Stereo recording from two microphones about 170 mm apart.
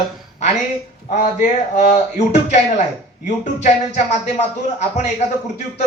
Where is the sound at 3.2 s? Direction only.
45° left (ahead or behind).